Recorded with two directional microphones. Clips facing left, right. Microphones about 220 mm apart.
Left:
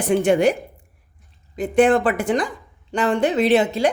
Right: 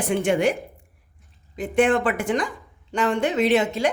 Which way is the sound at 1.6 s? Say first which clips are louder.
Left 4 dB; 35° left (ahead or behind).